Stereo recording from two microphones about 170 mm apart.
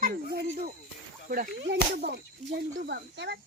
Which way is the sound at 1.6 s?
85° right.